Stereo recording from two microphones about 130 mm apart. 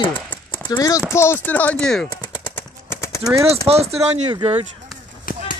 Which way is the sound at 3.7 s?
50° right (ahead or behind).